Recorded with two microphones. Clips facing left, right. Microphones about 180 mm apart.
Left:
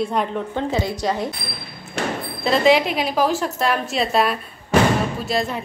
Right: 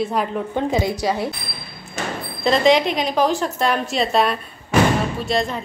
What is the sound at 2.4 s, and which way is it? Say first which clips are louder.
A woman's voice: right 1 dB; 5° left (ahead or behind).